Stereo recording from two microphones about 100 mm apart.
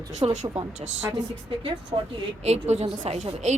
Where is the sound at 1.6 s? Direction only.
60° right (ahead or behind).